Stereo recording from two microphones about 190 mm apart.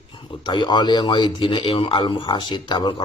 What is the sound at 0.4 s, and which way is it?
A man's voice, 25° left (ahead or behind).